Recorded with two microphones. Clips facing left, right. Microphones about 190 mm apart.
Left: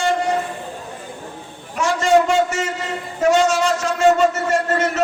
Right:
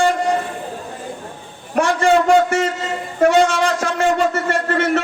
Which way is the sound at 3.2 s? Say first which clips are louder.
Right 2 dB; 55° right (ahead or behind).